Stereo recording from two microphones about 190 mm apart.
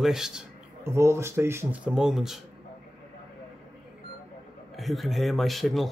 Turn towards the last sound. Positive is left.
turn(degrees=0)  # may be behind; listen again after turning